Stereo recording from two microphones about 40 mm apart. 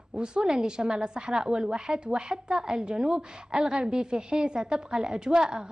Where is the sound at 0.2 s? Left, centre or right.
Right.